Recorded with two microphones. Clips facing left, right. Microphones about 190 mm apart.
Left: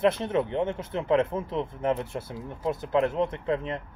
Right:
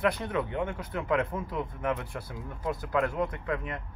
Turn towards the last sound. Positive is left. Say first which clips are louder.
# left 5 dB
turn(degrees=25)  # may be behind; listen again after turning